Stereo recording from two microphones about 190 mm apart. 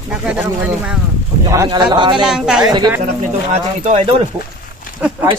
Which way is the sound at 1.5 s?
15° right (ahead or behind).